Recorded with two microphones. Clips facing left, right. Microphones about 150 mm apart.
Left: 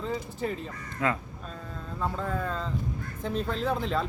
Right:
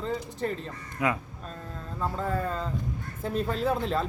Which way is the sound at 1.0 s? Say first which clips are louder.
Right 1 dB; 15° right (ahead or behind).